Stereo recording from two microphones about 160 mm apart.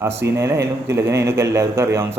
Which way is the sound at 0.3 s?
20° right (ahead or behind).